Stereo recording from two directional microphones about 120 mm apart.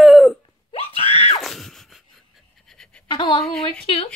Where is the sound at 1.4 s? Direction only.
Centre (ahead or behind).